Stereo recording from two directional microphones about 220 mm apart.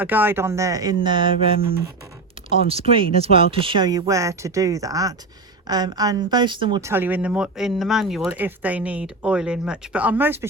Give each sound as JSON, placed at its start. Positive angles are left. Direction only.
{"t": 0.0, "sound": "speech", "side_deg": -10}
{"t": 2.6, "sound": "a woman's voice", "side_deg": -25}
{"t": 6.9, "sound": "speech", "side_deg": -10}